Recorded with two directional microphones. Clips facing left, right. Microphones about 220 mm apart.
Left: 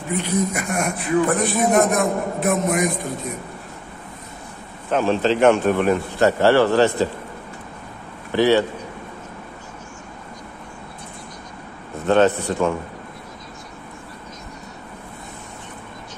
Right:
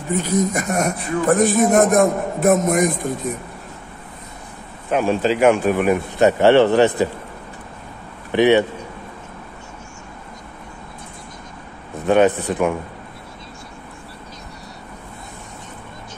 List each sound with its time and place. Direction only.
0.1 s speech: 40° right (ahead or behind)
4.9 s speech: 10° right (ahead or behind)
8.3 s a man's voice: 20° right (ahead or behind)
12.1 s speech: 15° right (ahead or behind)